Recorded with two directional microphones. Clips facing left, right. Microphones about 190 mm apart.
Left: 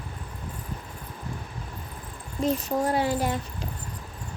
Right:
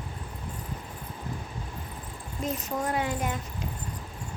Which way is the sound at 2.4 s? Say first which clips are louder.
Left 6 dB; 30° left (ahead or behind).